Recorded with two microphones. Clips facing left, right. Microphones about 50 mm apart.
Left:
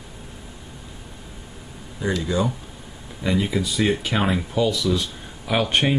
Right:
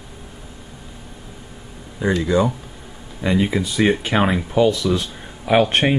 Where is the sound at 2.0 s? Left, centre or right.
Centre.